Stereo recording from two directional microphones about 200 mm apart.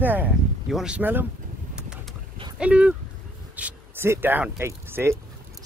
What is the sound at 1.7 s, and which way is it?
Vehicle, 5° right (ahead or behind).